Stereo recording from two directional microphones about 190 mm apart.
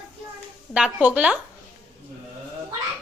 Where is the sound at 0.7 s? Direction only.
5° right (ahead or behind).